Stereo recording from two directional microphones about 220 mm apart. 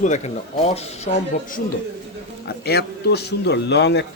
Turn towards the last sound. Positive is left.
turn(degrees=50)  # may be behind; listen again after turning